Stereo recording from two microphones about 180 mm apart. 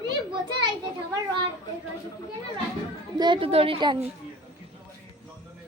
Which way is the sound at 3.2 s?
25° right (ahead or behind).